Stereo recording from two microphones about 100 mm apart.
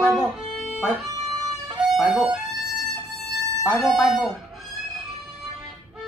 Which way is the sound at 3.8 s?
Centre (ahead or behind).